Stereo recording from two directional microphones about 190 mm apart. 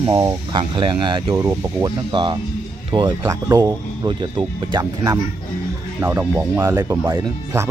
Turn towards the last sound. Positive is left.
turn(degrees=-15)  # may be behind; listen again after turning